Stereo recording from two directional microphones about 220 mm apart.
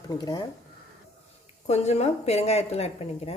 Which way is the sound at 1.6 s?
30° left (ahead or behind).